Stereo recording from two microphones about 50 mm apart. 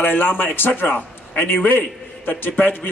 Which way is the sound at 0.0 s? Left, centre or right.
Left.